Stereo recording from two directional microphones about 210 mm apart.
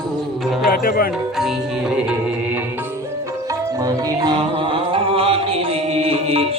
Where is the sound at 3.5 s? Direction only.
15° right (ahead or behind).